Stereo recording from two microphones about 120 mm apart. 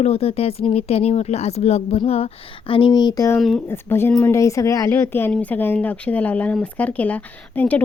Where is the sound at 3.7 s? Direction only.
20° left (ahead or behind).